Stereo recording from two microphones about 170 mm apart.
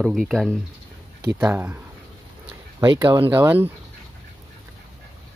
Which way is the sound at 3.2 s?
10° right (ahead or behind).